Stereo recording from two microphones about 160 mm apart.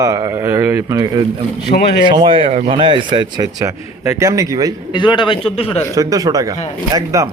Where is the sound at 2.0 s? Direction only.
30° right (ahead or behind).